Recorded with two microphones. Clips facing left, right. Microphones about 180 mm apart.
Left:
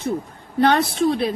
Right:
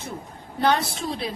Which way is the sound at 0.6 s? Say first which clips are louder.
Left 6 dB; 60° left (ahead or behind).